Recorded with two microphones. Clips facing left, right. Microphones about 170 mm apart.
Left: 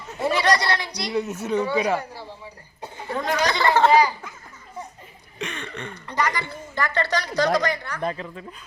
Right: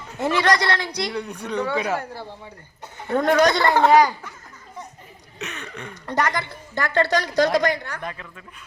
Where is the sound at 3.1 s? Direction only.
50° right (ahead or behind).